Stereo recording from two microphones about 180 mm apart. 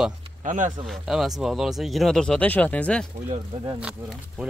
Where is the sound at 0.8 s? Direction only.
Centre (ahead or behind).